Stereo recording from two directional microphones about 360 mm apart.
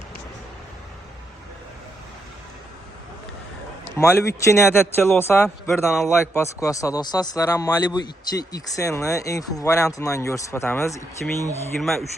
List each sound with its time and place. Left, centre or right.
3.8 s a man's voice: centre